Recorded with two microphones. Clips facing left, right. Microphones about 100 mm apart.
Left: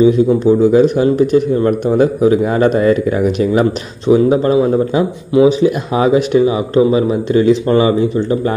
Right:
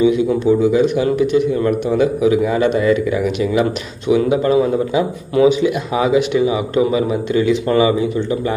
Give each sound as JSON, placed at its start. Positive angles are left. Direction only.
{"t": 0.0, "sound": "a man's voice", "side_deg": 40}
{"t": 5.9, "sound": "a man's voice", "side_deg": 40}